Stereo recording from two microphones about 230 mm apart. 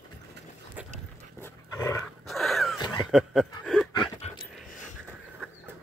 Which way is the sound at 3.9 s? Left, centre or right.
Centre.